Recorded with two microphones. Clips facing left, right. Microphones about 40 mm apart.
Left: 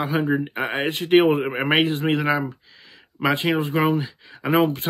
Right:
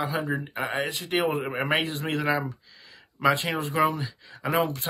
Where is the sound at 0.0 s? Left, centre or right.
Left.